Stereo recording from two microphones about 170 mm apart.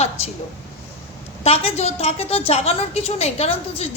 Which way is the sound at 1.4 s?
35° left (ahead or behind).